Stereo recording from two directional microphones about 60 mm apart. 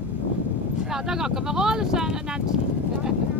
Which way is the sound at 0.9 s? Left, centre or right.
Centre.